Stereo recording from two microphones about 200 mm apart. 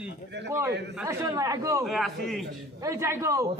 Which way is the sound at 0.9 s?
15° right (ahead or behind).